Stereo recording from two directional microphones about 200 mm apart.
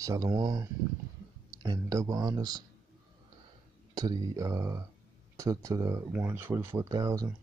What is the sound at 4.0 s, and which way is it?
Speech, 20° right (ahead or behind).